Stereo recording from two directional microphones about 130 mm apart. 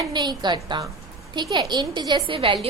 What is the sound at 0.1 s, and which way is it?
A woman's voice, 35° right (ahead or behind).